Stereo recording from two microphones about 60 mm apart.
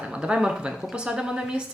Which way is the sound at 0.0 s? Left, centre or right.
Centre.